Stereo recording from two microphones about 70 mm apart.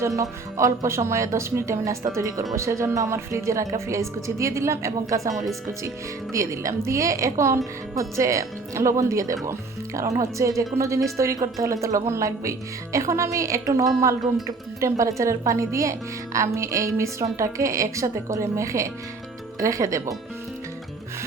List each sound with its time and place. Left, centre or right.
0.2 s speech: right
6.3 s speech: right